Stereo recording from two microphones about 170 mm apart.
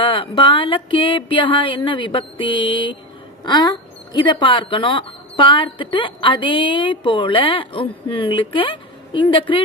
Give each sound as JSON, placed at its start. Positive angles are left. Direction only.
{"t": 0.0, "sound": "a woman's voice", "side_deg": 30}